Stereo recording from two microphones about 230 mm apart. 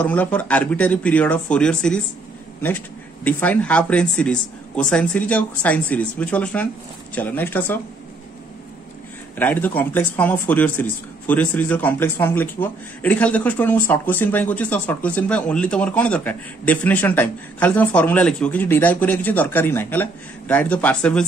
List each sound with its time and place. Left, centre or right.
0.0 s speech: centre
3.3 s speech: centre
9.4 s speech: centre